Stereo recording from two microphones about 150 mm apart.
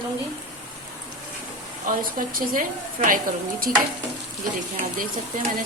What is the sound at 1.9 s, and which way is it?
A woman's voice, 65° right (ahead or behind).